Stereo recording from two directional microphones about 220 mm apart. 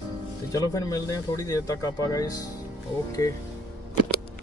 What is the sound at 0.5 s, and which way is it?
Speech, 15° left (ahead or behind).